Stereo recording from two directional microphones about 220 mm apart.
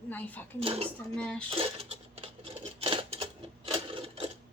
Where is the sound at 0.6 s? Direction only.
25° right (ahead or behind).